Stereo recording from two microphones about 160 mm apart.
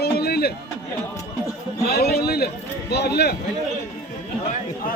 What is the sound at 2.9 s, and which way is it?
Speech, 90° left.